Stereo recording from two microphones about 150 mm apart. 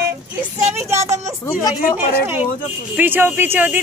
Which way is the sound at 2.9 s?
15° right (ahead or behind).